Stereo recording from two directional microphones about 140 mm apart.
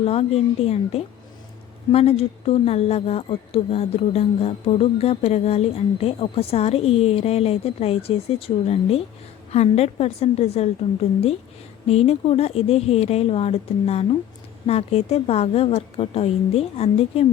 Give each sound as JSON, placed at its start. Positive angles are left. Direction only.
{"t": 0.0, "sound": "speech", "side_deg": 45}
{"t": 11.9, "sound": "speech", "side_deg": 45}